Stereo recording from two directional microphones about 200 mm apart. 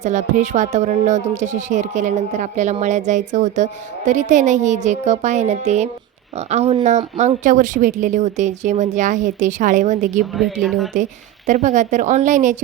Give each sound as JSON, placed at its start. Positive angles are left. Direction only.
{"t": 0.0, "sound": "speech", "side_deg": -35}
{"t": 10.3, "sound": "speech", "side_deg": 0}
{"t": 10.9, "sound": "speech", "side_deg": -35}